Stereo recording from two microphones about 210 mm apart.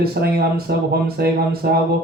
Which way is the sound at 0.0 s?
50° right (ahead or behind).